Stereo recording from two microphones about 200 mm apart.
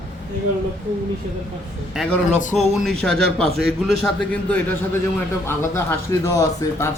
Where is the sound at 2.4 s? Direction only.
40° left (ahead or behind).